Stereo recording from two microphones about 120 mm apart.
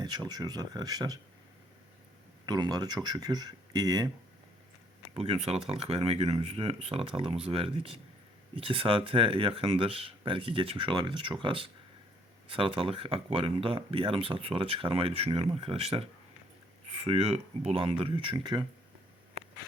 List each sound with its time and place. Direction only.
0.0 s speech: 35° right (ahead or behind)
2.5 s speech: 35° right (ahead or behind)
5.1 s speech: 60° right (ahead or behind); by 18.6 s 40° right (ahead or behind)